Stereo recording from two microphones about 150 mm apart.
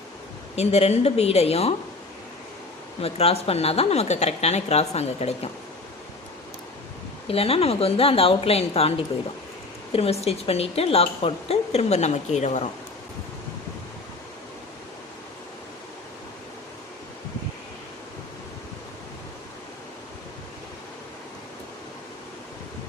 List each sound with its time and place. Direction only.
0.5 s a woman's voice: 45° left (ahead or behind)
3.0 s a woman's voice: 45° left (ahead or behind)
7.3 s a woman's voice: 40° left (ahead or behind)